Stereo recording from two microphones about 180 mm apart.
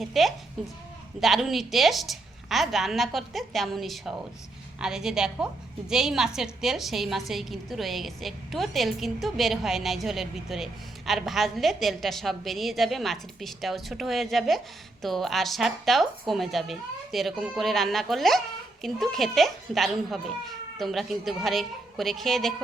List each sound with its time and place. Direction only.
0.0 s a woman's voice: centre (ahead or behind)